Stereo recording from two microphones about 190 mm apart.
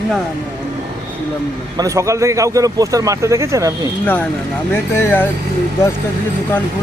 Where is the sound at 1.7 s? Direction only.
15° right (ahead or behind).